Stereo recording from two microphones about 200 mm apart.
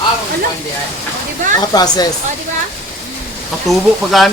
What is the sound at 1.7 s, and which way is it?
Speech, 20° left (ahead or behind).